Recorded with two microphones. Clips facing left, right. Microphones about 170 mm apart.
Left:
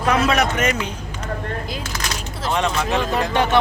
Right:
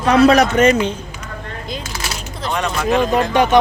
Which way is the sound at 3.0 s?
15° right (ahead or behind).